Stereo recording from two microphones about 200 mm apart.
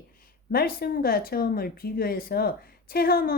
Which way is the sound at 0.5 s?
50° left (ahead or behind).